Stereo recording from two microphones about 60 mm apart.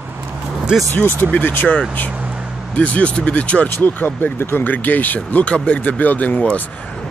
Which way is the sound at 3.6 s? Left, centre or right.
Left.